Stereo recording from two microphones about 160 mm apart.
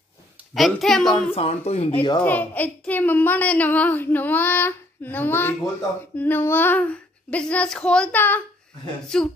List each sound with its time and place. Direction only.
0.6 s a child's voice: centre (ahead or behind)
1.1 s speech: 40° left (ahead or behind)
2.2 s a woman's voice: 10° left (ahead or behind)